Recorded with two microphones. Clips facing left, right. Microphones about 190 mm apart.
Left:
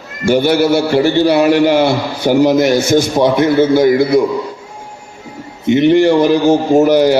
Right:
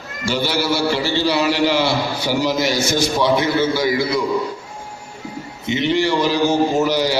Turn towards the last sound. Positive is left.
turn(degrees=55)  # may be behind; listen again after turning